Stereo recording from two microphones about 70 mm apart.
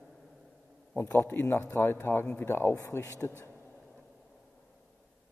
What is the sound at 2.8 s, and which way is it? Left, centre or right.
Speech, left.